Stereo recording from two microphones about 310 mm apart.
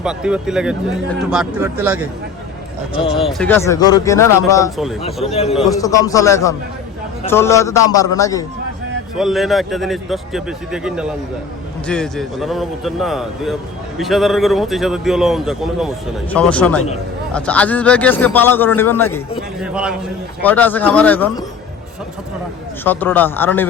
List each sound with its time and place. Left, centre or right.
0.0 s a man's voice: centre
9.1 s a man's voice: centre
22.8 s speech: centre